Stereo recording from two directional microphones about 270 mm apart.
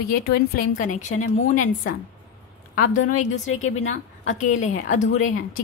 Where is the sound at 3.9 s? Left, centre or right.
Left.